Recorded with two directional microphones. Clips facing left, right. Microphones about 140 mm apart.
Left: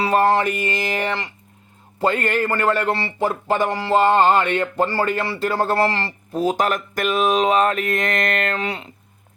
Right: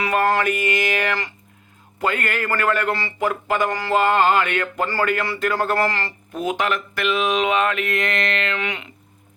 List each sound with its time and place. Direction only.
0.0 s speech: 30° left (ahead or behind)